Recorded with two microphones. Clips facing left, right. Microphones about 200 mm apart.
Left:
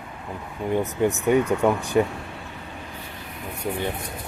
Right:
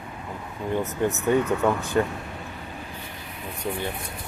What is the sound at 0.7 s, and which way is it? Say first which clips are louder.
Speech: left 3 dB; 15° left (ahead or behind).